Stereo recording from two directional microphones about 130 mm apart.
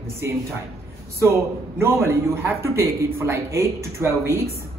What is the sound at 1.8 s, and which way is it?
A man's voice, 20° right (ahead or behind).